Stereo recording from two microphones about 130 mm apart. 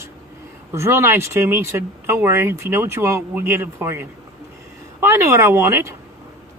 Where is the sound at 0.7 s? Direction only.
20° right (ahead or behind).